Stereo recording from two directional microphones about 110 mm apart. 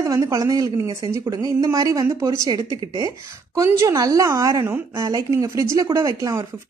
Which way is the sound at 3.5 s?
30° right (ahead or behind).